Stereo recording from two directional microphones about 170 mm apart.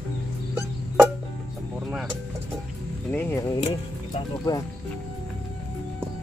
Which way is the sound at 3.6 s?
40° left (ahead or behind).